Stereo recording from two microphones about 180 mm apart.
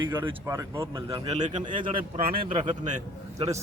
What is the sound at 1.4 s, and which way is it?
Speech, 40° right (ahead or behind).